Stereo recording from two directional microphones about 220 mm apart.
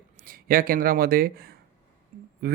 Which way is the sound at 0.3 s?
40° right (ahead or behind).